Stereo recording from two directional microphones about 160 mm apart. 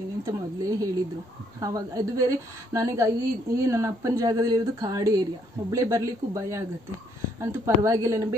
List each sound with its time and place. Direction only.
0.2 s speech: 20° right (ahead or behind)